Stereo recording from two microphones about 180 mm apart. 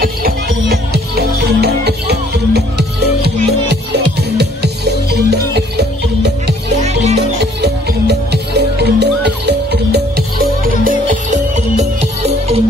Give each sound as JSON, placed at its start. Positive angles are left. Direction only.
{"t": 0.0, "sound": "music", "side_deg": -55}
{"t": 6.8, "sound": "music", "side_deg": -40}
{"t": 7.2, "sound": "music", "side_deg": -65}